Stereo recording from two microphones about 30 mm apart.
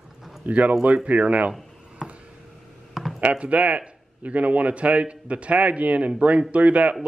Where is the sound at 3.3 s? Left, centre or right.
Right.